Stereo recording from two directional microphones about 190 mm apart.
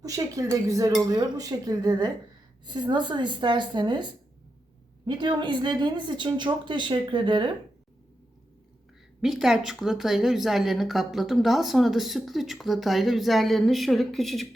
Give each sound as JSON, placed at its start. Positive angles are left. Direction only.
{"t": 0.0, "sound": "speech", "side_deg": -15}
{"t": 0.5, "sound": "dishes", "side_deg": -15}
{"t": 1.1, "sound": "a woman's voice", "side_deg": -20}
{"t": 9.2, "sound": "a woman's voice", "side_deg": 0}